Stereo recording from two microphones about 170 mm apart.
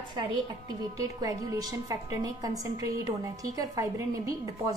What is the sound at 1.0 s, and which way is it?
A woman's voice, 20° right (ahead or behind).